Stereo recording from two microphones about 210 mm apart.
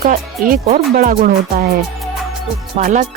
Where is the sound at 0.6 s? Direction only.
35° right (ahead or behind).